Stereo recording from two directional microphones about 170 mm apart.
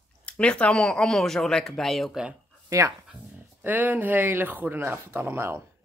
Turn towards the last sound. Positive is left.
turn(degrees=-15)  # may be behind; listen again after turning